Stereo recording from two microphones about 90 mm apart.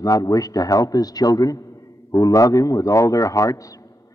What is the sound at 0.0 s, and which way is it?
Speech, 40° left (ahead or behind).